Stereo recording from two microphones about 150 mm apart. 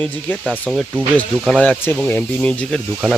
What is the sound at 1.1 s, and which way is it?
Speech, 5° left (ahead or behind).